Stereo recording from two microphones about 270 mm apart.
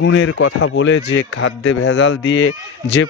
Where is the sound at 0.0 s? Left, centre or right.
Left.